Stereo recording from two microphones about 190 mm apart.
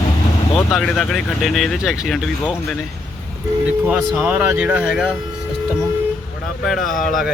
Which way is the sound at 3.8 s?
Centre (ahead or behind).